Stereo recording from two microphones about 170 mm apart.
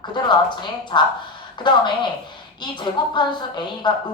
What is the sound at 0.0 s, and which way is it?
A woman's voice, 25° left (ahead or behind).